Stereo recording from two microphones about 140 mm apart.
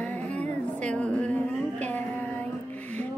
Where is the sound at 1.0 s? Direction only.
10° left (ahead or behind).